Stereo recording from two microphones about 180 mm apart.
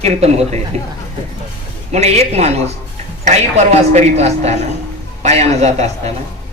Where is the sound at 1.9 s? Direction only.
35° right (ahead or behind).